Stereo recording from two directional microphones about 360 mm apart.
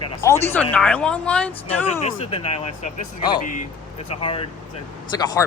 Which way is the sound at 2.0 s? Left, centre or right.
Centre.